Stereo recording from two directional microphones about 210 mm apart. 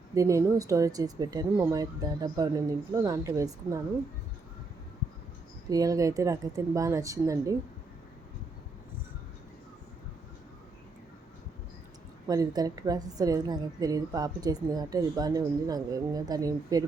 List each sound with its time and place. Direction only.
0.1 s a woman's voice: 15° right (ahead or behind)
5.6 s a woman's voice: 15° right (ahead or behind)
12.3 s a woman's voice: 15° right (ahead or behind)